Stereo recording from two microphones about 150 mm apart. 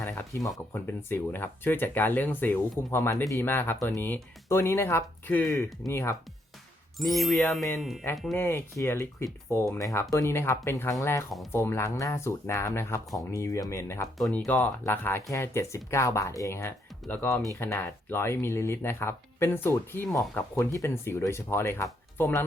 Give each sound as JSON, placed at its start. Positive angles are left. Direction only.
{"t": 0.0, "sound": "a sound", "side_deg": 15}
{"t": 0.7, "sound": "speech", "side_deg": 15}
{"t": 7.0, "sound": "speech", "side_deg": 0}
{"t": 8.4, "sound": "speech", "side_deg": 15}
{"t": 14.2, "sound": "speech", "side_deg": 5}